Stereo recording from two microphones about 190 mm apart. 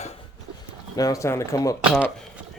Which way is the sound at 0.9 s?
20° left (ahead or behind).